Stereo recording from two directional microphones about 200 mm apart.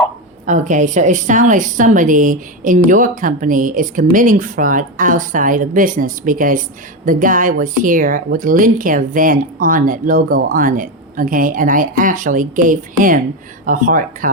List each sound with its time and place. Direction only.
0.4 s a woman's voice: 40° right (ahead or behind)